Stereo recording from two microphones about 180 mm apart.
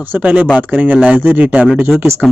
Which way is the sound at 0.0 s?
10° right (ahead or behind).